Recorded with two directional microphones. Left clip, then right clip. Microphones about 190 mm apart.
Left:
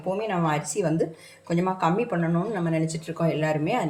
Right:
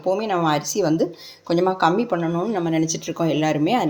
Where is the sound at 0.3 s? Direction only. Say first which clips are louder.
Right 5 dB; 40° right (ahead or behind).